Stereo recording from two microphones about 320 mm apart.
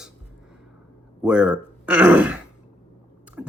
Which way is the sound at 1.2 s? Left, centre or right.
Centre.